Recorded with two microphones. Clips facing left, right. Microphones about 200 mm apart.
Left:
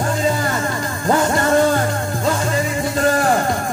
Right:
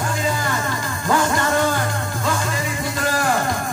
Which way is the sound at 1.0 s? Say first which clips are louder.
Left 3 dB; 35° left (ahead or behind).